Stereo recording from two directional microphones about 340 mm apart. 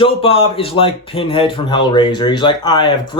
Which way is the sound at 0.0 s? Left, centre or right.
Centre.